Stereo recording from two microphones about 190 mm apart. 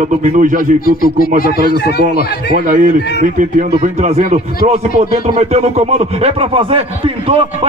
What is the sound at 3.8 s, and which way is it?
A man's voice, 35° right (ahead or behind).